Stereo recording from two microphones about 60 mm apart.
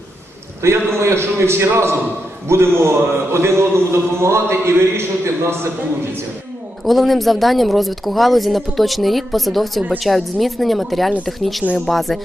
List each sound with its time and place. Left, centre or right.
0.6 s a man's voice: right
6.8 s speech: centre